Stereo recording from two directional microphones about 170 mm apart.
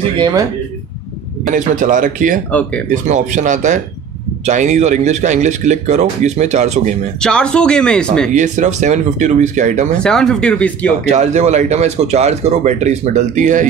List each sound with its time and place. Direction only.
0.2 s speech: 20° right (ahead or behind)
1.4 s speech: 50° right (ahead or behind)
7.2 s speech: 5° left (ahead or behind)
8.3 s speech: 45° right (ahead or behind)
9.9 s speech: 5° left (ahead or behind)
11.1 s speech: 40° right (ahead or behind)